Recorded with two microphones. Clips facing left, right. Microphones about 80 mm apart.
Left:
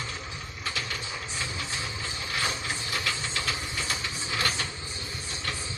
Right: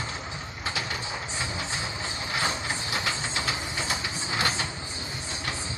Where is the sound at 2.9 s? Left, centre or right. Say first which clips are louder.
Right 2 dB; right.